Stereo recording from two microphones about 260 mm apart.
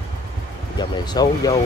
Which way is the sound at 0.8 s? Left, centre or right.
Centre.